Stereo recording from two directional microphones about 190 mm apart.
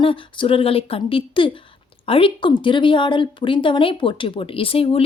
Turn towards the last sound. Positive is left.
turn(degrees=30)  # may be behind; listen again after turning